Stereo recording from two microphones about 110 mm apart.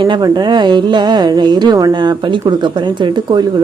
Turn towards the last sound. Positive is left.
turn(degrees=-45)  # may be behind; listen again after turning